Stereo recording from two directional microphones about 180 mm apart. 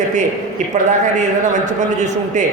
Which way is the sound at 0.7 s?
40° right (ahead or behind).